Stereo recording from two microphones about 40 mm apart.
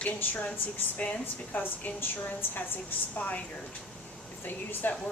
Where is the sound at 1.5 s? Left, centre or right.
Left.